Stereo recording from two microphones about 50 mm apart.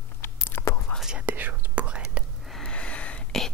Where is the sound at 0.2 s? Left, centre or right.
Left.